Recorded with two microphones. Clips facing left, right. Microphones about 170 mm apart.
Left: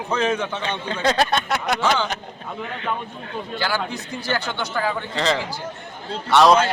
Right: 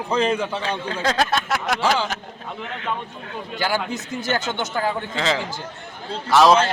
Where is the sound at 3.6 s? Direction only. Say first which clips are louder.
Right 2 dB; 15° right (ahead or behind).